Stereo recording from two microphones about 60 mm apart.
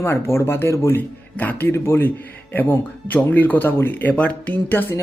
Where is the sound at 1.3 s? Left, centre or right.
Left.